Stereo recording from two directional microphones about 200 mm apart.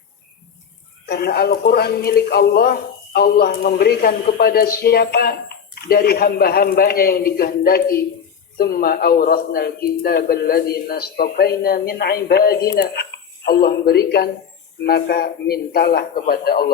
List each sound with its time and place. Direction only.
1.0 s a man's voice: 55° left (ahead or behind)